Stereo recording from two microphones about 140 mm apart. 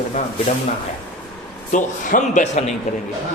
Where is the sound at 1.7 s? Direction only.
65° left (ahead or behind).